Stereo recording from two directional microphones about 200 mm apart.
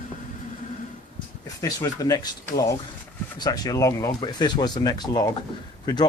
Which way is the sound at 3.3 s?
20° left (ahead or behind).